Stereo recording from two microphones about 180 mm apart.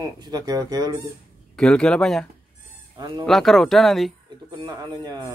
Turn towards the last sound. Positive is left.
turn(degrees=-20)  # may be behind; listen again after turning